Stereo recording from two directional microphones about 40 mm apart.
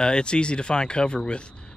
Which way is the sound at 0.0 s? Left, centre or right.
Left.